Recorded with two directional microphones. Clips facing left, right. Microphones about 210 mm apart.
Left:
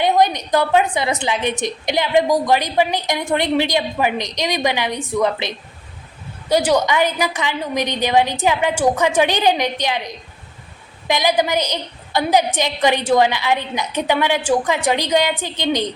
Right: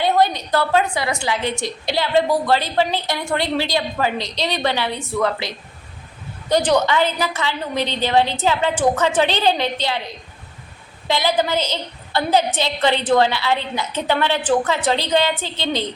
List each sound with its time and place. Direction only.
0.0 s a woman's voice: 20° left (ahead or behind)
6.5 s a woman's voice: 10° left (ahead or behind)